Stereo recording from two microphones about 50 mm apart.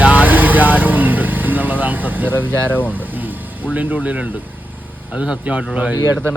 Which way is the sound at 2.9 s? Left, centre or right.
Right.